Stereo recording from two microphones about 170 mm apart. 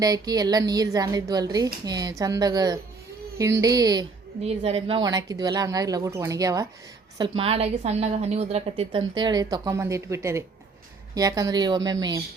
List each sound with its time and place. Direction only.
0.0 s a woman's voice: 20° right (ahead or behind)
4.4 s a woman's voice: 35° right (ahead or behind); by 6.7 s 20° right (ahead or behind)
7.2 s a woman's voice: 35° right (ahead or behind)